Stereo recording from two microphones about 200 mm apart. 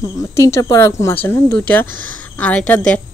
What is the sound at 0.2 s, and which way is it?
A woman's voice, 15° left (ahead or behind).